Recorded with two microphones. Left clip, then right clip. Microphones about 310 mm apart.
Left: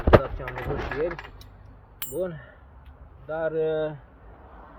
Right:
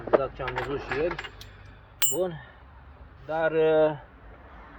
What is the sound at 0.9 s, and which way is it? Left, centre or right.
Speech, centre.